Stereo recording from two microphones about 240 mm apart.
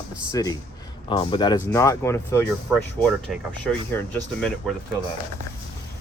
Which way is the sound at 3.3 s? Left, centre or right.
Centre.